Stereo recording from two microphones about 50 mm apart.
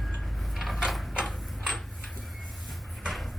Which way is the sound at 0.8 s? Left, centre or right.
Centre.